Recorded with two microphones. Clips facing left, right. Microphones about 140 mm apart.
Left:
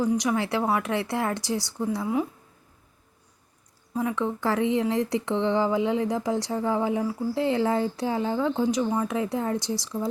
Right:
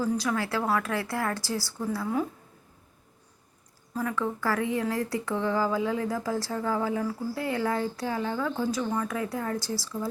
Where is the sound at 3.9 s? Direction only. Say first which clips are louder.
Left 3 dB; 20° left (ahead or behind).